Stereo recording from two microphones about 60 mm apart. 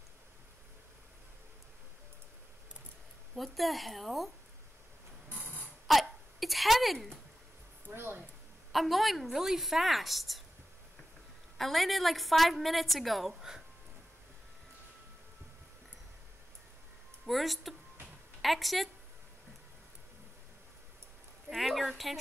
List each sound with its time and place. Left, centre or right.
3.3 s a woman's voice: centre
5.3 s a sound: right
5.9 s hiccup: centre
7.9 s speech: right
8.7 s a woman's voice: centre
11.5 s a woman's voice: centre
17.3 s a woman's voice: centre
21.5 s a woman's voice: centre